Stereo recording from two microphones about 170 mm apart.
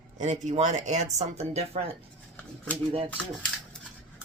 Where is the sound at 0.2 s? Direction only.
45° right (ahead or behind).